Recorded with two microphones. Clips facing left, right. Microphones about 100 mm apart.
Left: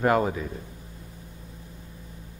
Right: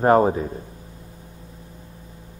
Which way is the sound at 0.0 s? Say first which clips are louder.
Right 6 dB; 35° right (ahead or behind).